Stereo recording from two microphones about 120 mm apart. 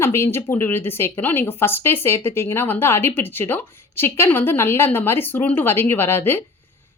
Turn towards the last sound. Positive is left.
turn(degrees=20)  # may be behind; listen again after turning